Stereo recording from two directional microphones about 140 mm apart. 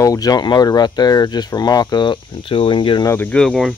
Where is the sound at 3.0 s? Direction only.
15° left (ahead or behind).